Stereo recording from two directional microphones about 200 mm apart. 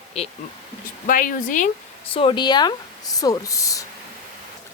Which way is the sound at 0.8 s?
45° left (ahead or behind).